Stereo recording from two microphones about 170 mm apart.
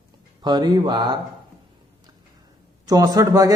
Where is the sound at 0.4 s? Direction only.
25° right (ahead or behind).